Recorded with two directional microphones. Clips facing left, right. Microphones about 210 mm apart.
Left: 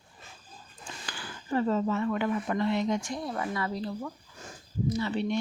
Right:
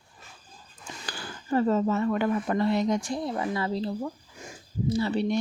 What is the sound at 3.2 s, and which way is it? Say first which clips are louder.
Speech: right 3 dB; 25° right (ahead or behind).